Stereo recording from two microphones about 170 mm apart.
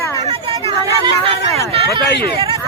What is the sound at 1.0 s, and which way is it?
Speech, 35° right (ahead or behind).